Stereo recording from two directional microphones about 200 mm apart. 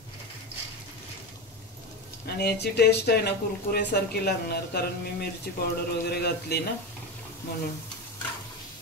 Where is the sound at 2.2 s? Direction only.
50° left (ahead or behind).